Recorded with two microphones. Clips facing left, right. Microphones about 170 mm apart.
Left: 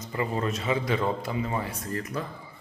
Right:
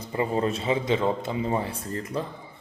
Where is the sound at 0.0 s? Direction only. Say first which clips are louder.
Right 3 dB; 30° right (ahead or behind).